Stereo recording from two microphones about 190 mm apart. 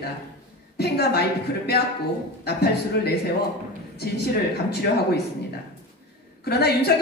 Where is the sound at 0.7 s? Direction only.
55° left (ahead or behind).